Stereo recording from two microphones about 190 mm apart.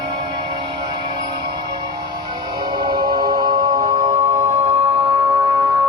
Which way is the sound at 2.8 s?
20° right (ahead or behind).